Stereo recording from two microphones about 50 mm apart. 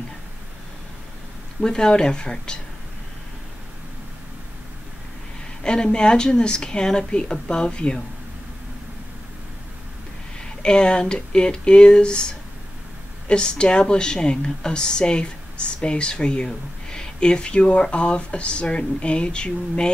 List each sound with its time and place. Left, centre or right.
1.6 s a woman's voice: centre
5.6 s a woman's voice: centre
10.4 s a woman's voice: centre